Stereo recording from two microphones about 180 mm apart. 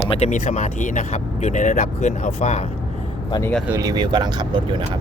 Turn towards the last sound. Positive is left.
turn(degrees=-25)  # may be behind; listen again after turning